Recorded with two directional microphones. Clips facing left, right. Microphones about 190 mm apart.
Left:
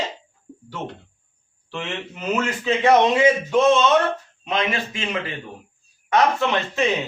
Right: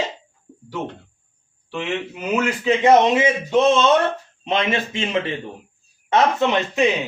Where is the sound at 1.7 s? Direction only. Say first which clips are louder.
Right 4 dB; 10° right (ahead or behind).